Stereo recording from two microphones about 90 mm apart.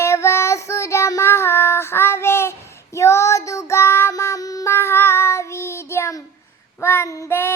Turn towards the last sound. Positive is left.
turn(degrees=35)  # may be behind; listen again after turning